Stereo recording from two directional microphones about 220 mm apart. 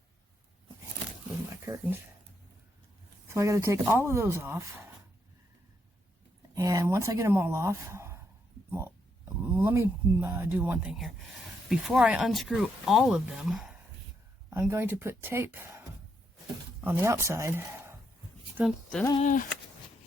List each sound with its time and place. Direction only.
1.6 s speech: 10° right (ahead or behind)
3.3 s speech: 15° right (ahead or behind)
6.5 s speech: 15° right (ahead or behind)
9.4 s speech: 10° right (ahead or behind)
16.8 s speech: 10° right (ahead or behind)
18.5 s speech: centre (ahead or behind)
19.2 s speech: 35° left (ahead or behind)